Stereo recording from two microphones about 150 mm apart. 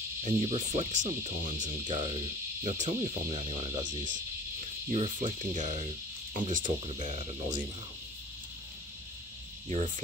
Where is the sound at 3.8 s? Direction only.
60° right (ahead or behind).